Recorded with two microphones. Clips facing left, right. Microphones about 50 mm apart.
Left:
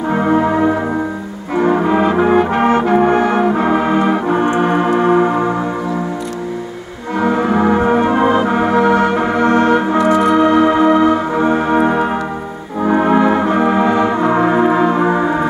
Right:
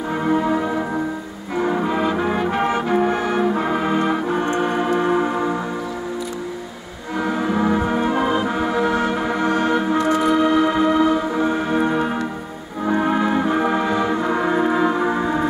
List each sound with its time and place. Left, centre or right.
0.1 s music: left
1.5 s brass instrument: left
7.2 s brass instrument: left
9.5 s organ: left
10.3 s music: left
12.8 s brass instrument: left